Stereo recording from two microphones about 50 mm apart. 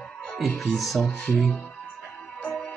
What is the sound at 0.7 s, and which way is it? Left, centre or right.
Music, centre.